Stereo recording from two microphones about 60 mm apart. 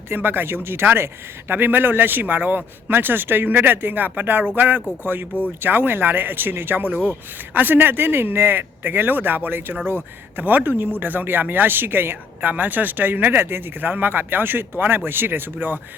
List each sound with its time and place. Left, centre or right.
0.1 s speech: right